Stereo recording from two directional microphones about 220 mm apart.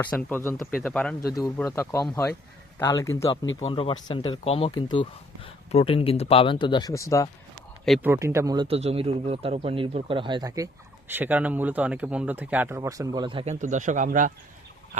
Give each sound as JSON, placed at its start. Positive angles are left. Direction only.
{"t": 0.0, "sound": "speech", "side_deg": 10}
{"t": 7.9, "sound": "speech", "side_deg": 0}
{"t": 8.1, "sound": "speech", "side_deg": -10}
{"t": 8.6, "sound": "speech", "side_deg": -25}